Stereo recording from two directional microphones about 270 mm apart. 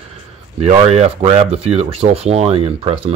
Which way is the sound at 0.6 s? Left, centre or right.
Right.